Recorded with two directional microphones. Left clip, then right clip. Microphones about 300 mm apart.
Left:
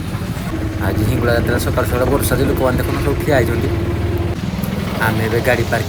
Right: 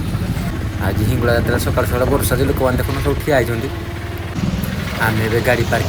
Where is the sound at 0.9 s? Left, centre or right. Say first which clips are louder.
Even; centre.